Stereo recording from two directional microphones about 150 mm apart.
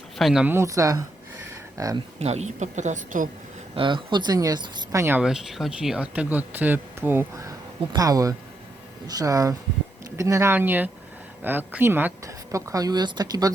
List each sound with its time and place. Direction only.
0.2 s speech: centre (ahead or behind)
0.4 s speech: 20° right (ahead or behind)
2.1 s speech: 45° right (ahead or behind)
3.8 s speech: 35° right (ahead or behind); by 5.2 s 15° right (ahead or behind)
5.2 s speech: 5° right (ahead or behind); by 13.5 s 25° right (ahead or behind)